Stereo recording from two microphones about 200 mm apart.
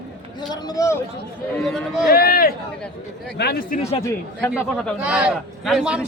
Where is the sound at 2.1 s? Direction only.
50° left (ahead or behind).